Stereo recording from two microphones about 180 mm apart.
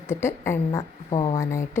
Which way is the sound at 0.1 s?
15° left (ahead or behind).